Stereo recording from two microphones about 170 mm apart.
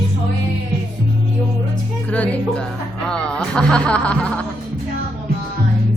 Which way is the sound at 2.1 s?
10° left (ahead or behind).